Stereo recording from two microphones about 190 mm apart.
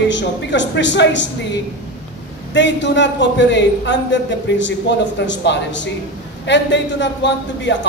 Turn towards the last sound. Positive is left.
turn(degrees=70)  # may be behind; listen again after turning